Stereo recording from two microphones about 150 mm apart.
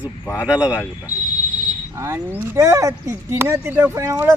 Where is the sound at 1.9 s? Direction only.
20° right (ahead or behind).